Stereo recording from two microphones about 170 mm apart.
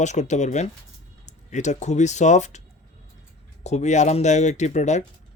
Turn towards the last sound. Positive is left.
turn(degrees=45)  # may be behind; listen again after turning